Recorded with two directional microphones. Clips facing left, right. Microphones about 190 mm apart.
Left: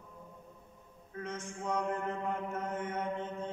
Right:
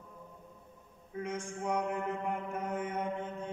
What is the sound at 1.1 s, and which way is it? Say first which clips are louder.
Mantra: right 3 dB; 15° right (ahead or behind).